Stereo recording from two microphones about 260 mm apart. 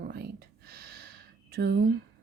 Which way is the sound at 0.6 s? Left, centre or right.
Right.